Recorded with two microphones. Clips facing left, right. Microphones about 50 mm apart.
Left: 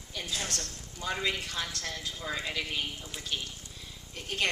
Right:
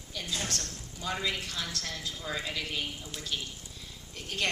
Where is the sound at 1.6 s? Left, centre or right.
Centre.